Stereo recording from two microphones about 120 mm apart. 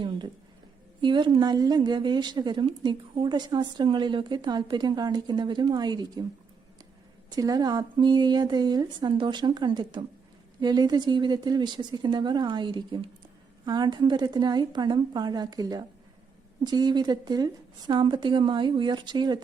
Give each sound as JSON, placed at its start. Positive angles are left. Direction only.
{"t": 1.0, "sound": "speech", "side_deg": -40}
{"t": 7.3, "sound": "speech", "side_deg": -35}